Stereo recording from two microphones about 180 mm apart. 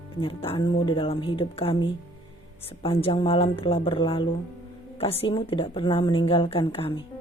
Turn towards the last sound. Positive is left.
turn(degrees=30)  # may be behind; listen again after turning